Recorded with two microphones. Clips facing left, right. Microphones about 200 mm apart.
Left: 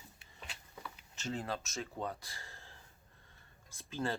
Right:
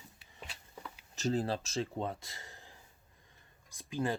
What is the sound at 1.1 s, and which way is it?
Speech, 40° right (ahead or behind).